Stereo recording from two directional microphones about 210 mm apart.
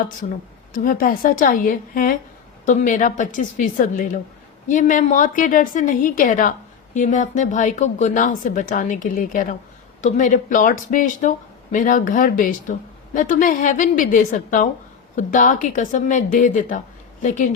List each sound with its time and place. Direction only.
0.2 s speech: 40° left (ahead or behind)